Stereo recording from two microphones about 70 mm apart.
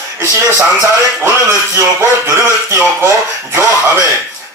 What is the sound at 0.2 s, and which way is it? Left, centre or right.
Speech, right.